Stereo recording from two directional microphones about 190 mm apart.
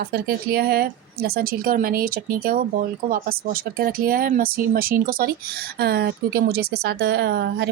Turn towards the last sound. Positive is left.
turn(degrees=-55)  # may be behind; listen again after turning